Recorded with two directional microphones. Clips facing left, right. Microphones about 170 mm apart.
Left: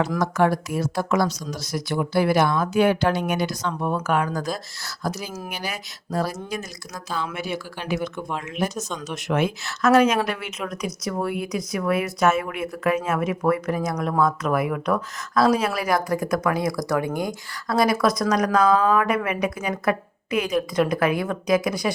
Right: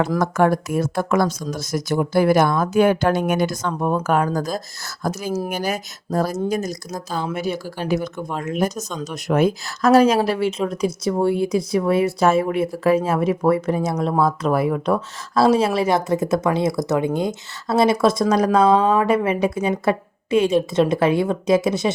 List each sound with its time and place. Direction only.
0.2 s speech: 50° right (ahead or behind); by 21.9 s 25° right (ahead or behind)